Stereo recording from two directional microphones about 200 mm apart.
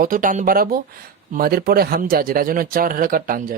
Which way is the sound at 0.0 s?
45° right (ahead or behind).